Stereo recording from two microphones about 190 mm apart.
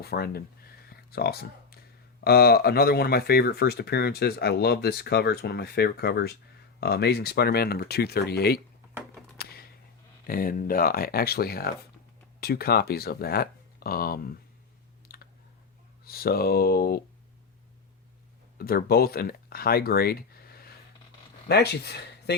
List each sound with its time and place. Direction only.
0.0 s speech: 55° left (ahead or behind)
0.9 s a sound: 55° left (ahead or behind)
2.2 s speech: 55° left (ahead or behind)
9.4 s a sound: 55° left (ahead or behind)
10.2 s speech: 50° left (ahead or behind)
15.0 s clicking: 55° left (ahead or behind)
16.0 s speech: 55° left (ahead or behind)
18.5 s speech: 50° left (ahead or behind)